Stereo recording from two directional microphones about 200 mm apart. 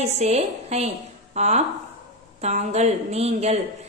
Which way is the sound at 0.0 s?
35° right (ahead or behind).